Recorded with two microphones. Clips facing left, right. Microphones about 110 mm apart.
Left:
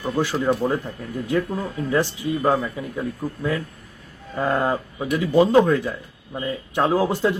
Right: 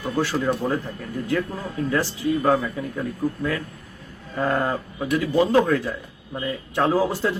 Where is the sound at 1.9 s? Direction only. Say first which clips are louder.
Left 1 dB; 20° left (ahead or behind).